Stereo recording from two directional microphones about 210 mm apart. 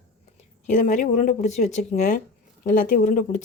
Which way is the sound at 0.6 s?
40° left (ahead or behind).